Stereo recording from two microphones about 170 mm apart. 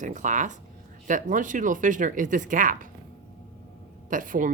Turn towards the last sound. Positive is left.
turn(degrees=-50)  # may be behind; listen again after turning